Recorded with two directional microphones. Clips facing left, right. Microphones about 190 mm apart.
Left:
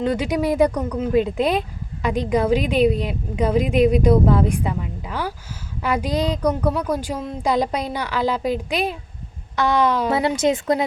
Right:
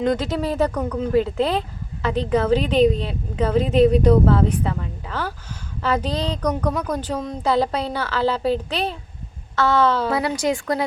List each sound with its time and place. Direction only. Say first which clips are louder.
0.0 s a woman's voice: left 1 dB; 10° left (ahead or behind)
1.1 s a woman's voice: left 1 dB; 15° left (ahead or behind)